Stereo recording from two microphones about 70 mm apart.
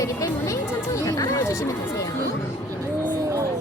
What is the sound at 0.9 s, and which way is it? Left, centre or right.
Speech, left.